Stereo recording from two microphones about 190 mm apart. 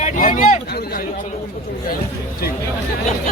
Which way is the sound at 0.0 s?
45° left (ahead or behind).